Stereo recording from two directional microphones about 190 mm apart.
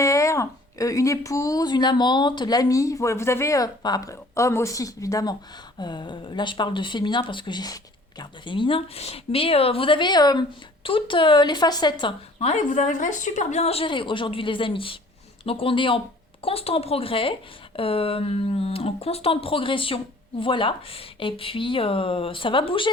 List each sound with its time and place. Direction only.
0.0 s a woman's voice: 15° left (ahead or behind)